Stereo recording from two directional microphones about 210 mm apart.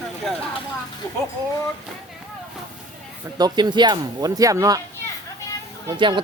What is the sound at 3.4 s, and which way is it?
Speech, 20° right (ahead or behind).